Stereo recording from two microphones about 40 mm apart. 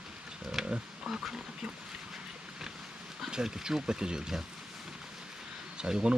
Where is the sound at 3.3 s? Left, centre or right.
Centre.